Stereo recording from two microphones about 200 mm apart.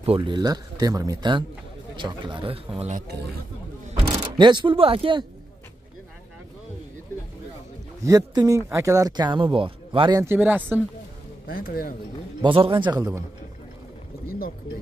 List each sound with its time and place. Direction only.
0.0 s speech: 25° right (ahead or behind)
4.0 s speech: 20° right (ahead or behind)
8.0 s speech: 15° right (ahead or behind)
10.2 s speech: 10° right (ahead or behind)
11.4 s speech: 45° left (ahead or behind)
12.4 s speech: 25° right (ahead or behind)